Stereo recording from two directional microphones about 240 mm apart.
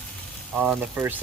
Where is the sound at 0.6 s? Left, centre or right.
Centre.